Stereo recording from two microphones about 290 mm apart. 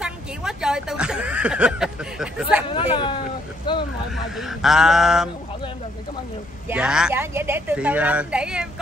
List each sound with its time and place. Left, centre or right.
0.0 s a sound: centre
2.7 s speech: centre
4.4 s speech: centre
6.7 s speech: centre